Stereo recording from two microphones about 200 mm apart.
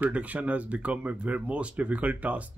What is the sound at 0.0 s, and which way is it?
Speech, 5° right (ahead or behind).